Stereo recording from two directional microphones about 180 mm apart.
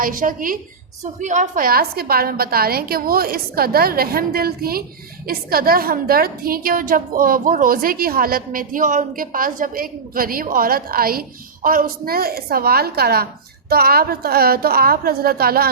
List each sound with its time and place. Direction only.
0.0 s a woman's voice: 50° right (ahead or behind)